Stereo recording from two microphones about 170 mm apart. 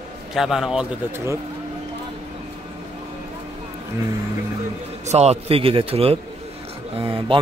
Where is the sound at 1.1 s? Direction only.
15° right (ahead or behind).